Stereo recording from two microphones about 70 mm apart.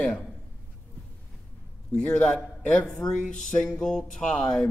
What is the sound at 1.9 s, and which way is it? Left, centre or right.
Speech, centre.